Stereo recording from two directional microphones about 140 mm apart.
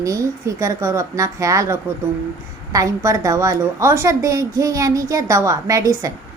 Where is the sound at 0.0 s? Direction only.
25° right (ahead or behind).